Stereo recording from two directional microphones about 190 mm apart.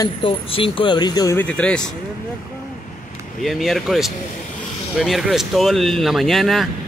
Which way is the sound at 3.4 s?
Centre (ahead or behind).